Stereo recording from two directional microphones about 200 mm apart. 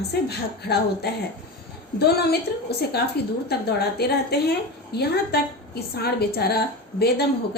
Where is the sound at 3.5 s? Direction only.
55° left (ahead or behind).